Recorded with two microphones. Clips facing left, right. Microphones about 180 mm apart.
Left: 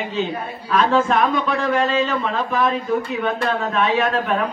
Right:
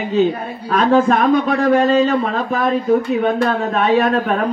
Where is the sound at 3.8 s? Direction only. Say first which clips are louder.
Right 5 dB; 40° right (ahead or behind).